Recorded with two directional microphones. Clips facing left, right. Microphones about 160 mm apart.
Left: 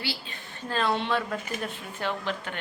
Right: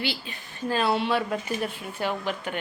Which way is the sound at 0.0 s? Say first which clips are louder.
Right 4 dB; 15° right (ahead or behind).